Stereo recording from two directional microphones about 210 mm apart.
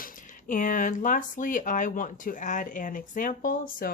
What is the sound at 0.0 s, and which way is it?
A woman's voice, 40° left (ahead or behind).